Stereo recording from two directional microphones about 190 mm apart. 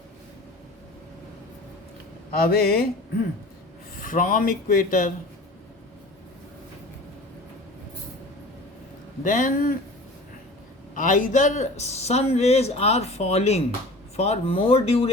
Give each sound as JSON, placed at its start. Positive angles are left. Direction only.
{"t": 2.3, "sound": "speech", "side_deg": 55}
{"t": 3.9, "sound": "speech", "side_deg": 45}
{"t": 9.2, "sound": "speech", "side_deg": 45}
{"t": 10.9, "sound": "a man's voice", "side_deg": 45}